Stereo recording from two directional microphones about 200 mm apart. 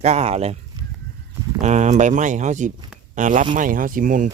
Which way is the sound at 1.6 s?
35° right (ahead or behind).